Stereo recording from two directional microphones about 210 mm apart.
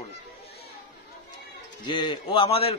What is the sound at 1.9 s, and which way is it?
Speech, 25° left (ahead or behind).